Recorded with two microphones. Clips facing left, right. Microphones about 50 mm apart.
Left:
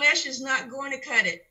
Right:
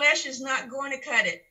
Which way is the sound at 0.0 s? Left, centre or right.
Right.